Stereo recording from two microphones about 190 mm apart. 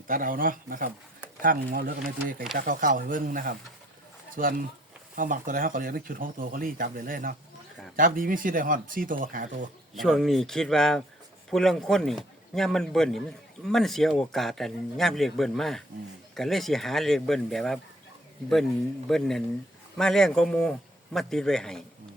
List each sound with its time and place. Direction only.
0.1 s speech: 45° right (ahead or behind)
9.9 s speech: centre (ahead or behind)
19.0 s speech: centre (ahead or behind)